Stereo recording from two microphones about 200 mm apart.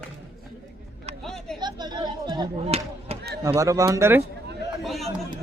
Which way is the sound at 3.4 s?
15° right (ahead or behind).